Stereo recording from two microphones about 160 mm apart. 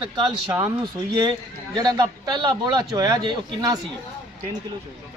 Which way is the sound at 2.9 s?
25° right (ahead or behind).